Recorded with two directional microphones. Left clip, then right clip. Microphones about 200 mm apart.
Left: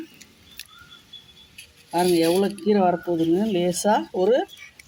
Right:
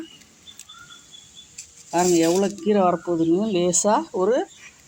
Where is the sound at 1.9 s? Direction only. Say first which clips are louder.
Right 1 dB; 5° right (ahead or behind).